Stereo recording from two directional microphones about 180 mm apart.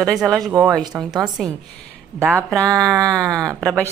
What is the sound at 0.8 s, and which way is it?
Speech, 25° right (ahead or behind).